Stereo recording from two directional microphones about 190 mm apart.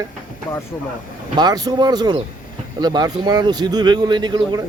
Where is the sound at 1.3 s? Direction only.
20° right (ahead or behind).